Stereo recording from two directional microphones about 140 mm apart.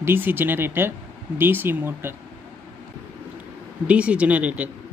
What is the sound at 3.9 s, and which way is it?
Speech, 10° right (ahead or behind).